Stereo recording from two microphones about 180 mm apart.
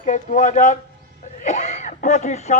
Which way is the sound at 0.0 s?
40° left (ahead or behind).